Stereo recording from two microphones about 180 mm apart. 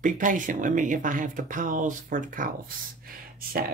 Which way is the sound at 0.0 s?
45° right (ahead or behind).